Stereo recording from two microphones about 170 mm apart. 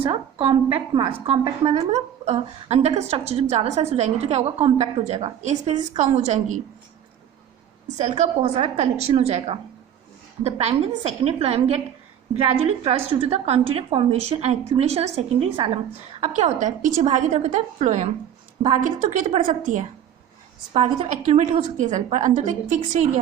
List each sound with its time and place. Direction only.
0.0 s a woman's voice: 35° right (ahead or behind)
8.1 s a woman's voice: 30° right (ahead or behind)
16.2 s a woman's voice: 45° right (ahead or behind)
20.7 s a woman's voice: 40° right (ahead or behind)